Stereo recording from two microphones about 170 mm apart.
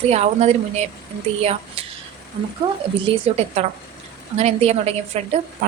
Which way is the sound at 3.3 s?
40° right (ahead or behind).